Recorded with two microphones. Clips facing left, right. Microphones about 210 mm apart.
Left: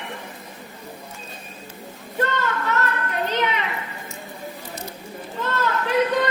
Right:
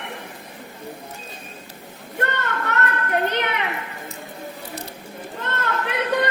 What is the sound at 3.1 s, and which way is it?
Children playing, 60° right (ahead or behind).